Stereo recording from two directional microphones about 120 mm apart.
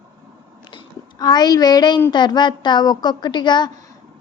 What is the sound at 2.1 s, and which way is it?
A woman's voice, 40° left (ahead or behind).